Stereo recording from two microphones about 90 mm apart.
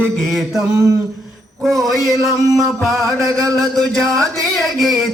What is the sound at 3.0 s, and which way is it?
Chant, 35° right (ahead or behind).